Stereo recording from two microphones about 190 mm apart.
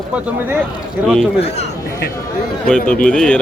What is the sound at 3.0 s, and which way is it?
Speech, 5° left (ahead or behind).